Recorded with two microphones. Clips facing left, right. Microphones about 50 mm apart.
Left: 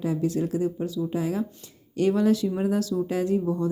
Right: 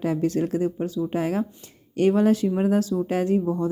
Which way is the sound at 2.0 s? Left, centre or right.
Right.